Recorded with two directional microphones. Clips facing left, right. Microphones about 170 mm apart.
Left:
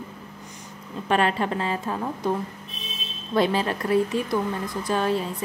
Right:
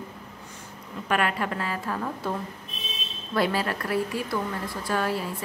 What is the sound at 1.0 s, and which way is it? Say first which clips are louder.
Speech: left 4 dB; 25° left (ahead or behind).